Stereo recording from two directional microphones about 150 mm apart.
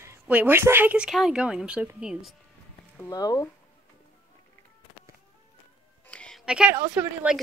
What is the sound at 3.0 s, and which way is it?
Speech, 25° left (ahead or behind).